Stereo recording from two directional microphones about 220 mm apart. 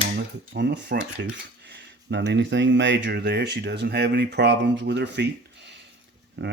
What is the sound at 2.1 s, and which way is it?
Speech, 55° right (ahead or behind).